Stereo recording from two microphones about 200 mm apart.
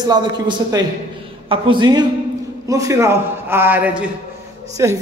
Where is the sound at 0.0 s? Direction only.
20° right (ahead or behind).